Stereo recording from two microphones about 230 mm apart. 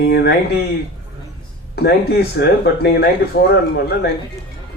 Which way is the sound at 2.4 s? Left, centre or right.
Left.